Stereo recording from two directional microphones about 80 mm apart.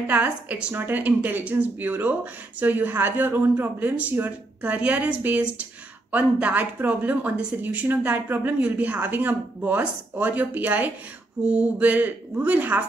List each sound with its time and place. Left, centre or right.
0.0 s speech: right